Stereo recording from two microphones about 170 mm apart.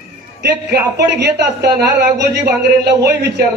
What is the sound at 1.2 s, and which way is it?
Speech, 70° right (ahead or behind).